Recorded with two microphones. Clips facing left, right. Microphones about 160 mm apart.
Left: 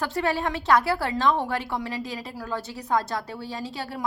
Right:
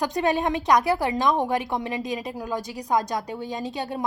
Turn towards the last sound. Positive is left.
turn(degrees=-20)  # may be behind; listen again after turning